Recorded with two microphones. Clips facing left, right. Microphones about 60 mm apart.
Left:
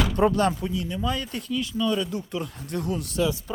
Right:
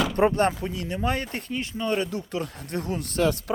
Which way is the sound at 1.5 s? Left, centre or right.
Right.